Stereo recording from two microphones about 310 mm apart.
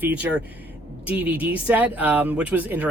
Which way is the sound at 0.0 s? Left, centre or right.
Centre.